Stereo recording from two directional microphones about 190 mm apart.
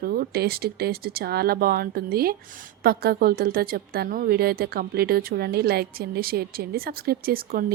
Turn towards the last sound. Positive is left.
turn(degrees=-50)  # may be behind; listen again after turning